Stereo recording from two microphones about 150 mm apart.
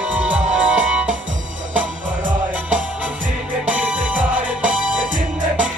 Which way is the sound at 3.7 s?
10° right (ahead or behind).